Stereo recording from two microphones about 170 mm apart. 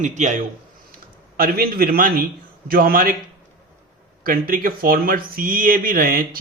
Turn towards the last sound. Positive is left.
turn(degrees=-55)  # may be behind; listen again after turning